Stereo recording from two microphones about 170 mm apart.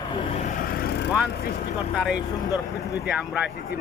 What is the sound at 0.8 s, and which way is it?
Vehicle, 70° left (ahead or behind).